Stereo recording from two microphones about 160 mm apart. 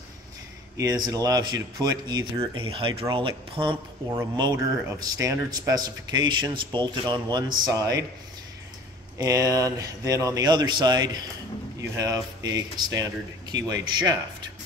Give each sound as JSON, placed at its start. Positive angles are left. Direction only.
{"t": 0.7, "sound": "speech", "side_deg": -25}
{"t": 9.2, "sound": "speech", "side_deg": -20}